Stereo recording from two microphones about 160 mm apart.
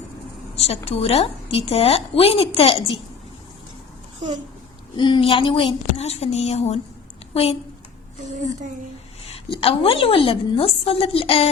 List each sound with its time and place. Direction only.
0.5 s a woman's voice: 40° left (ahead or behind)
4.9 s a woman's voice: 30° left (ahead or behind)
9.5 s a woman's voice: 35° left (ahead or behind)